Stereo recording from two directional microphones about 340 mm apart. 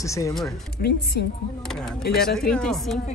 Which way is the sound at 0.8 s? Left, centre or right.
Left.